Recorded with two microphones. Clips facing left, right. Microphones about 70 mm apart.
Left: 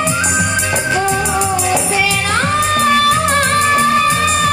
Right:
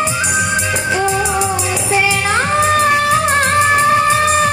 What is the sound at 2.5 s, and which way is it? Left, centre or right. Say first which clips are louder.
Music: right 2 dB; right.